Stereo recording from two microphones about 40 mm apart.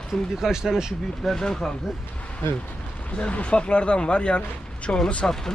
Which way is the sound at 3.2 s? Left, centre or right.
Left.